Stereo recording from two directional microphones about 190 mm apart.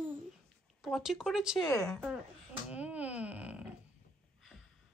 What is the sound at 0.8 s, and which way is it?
Speech, centre (ahead or behind).